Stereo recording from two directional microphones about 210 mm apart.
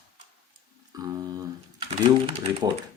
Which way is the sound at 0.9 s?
15° right (ahead or behind).